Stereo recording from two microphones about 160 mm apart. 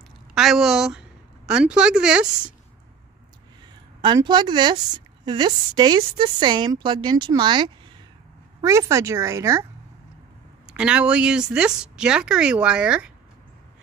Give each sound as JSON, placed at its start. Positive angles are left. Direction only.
{"t": 0.3, "sound": "a woman's voice", "side_deg": 0}
{"t": 4.0, "sound": "a woman's voice", "side_deg": -30}
{"t": 10.7, "sound": "speech", "side_deg": -5}